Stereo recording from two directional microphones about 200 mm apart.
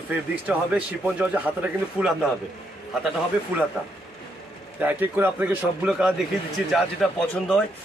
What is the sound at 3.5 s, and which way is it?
Speech, 10° right (ahead or behind).